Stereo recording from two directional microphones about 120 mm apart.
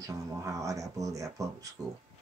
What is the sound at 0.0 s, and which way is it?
Speech, 25° right (ahead or behind).